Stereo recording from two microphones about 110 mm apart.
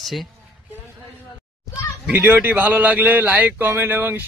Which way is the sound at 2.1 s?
20° right (ahead or behind).